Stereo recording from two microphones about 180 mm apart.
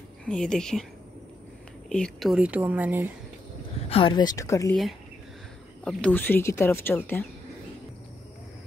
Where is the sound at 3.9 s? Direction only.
30° left (ahead or behind).